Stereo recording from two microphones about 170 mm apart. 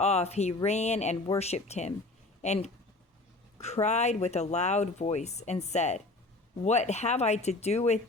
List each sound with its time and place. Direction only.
0.0 s speech: 40° left (ahead or behind)